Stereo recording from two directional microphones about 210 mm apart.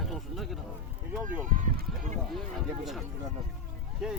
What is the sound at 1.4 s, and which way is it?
Run, 35° right (ahead or behind).